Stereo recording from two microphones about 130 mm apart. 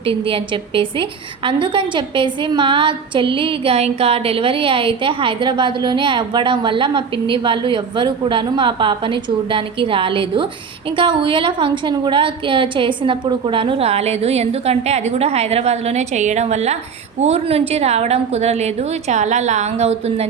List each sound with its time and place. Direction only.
0.0 s a woman's voice: 45° right (ahead or behind)